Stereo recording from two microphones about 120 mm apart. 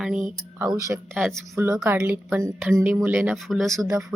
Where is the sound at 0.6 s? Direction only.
30° right (ahead or behind).